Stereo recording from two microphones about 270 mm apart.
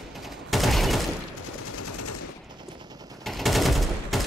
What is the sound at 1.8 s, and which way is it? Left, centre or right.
Machine gun, left.